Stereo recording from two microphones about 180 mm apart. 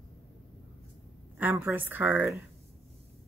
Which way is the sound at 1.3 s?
10° right (ahead or behind).